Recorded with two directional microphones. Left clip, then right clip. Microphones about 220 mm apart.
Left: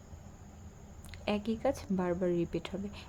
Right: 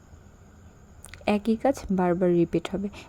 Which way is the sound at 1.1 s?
25° right (ahead or behind).